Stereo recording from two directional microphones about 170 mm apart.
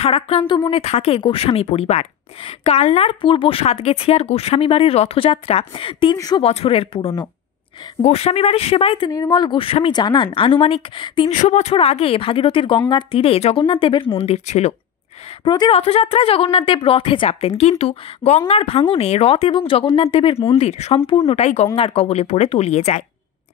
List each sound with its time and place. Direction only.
0.0 s speech: 35° left (ahead or behind)
6.1 s a woman's voice: 20° left (ahead or behind)
6.4 s speech: 35° left (ahead or behind)
11.2 s speech: 40° left (ahead or behind)
15.4 s a woman's voice: 25° left (ahead or behind)